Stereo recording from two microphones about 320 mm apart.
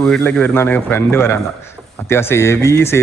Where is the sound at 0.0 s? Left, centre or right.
Centre.